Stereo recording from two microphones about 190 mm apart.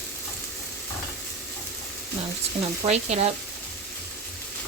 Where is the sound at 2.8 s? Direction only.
35° right (ahead or behind).